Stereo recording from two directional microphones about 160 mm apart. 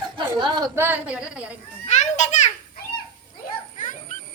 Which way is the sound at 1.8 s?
45° left (ahead or behind).